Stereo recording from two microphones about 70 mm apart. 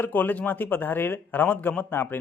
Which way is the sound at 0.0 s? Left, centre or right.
Left.